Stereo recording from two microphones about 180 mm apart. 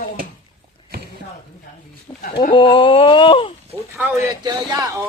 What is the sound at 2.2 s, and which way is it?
Speech, 50° left (ahead or behind).